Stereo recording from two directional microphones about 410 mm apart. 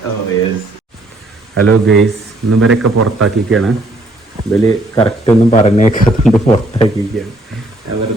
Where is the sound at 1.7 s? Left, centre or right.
Right.